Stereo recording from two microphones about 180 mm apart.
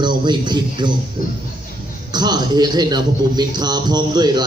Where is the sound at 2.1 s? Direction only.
25° right (ahead or behind).